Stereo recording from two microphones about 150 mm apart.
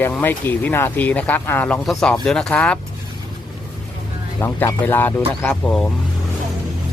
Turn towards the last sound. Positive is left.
turn(degrees=5)  # may be behind; listen again after turning